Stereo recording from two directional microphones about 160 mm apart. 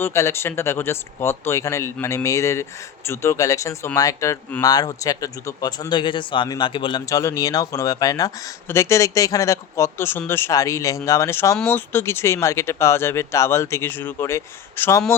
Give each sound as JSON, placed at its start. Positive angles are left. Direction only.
{"t": 0.0, "sound": "speech", "side_deg": 15}